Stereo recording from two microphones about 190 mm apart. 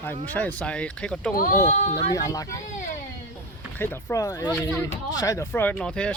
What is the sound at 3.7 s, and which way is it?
Speech, 10° left (ahead or behind).